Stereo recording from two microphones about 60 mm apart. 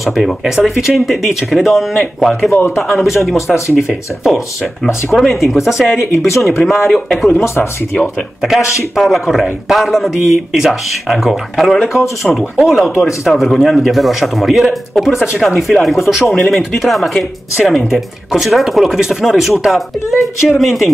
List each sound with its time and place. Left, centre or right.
0.0 s a man's voice: centre
2.5 s speech: left
2.9 s a man's voice: centre
6.1 s speech: left
6.9 s a man's voice: centre
7.3 s speech: left
8.9 s a man's voice: centre